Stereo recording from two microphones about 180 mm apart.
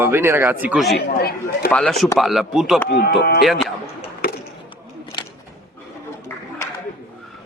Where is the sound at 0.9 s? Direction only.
60° left (ahead or behind).